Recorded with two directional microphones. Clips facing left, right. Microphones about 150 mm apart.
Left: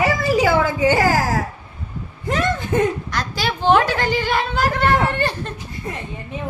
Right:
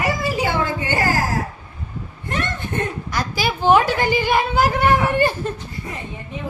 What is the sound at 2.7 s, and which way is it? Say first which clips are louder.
Speech: left 7 dB; 90° left.